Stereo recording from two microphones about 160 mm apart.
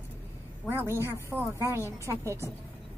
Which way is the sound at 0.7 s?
15° right (ahead or behind).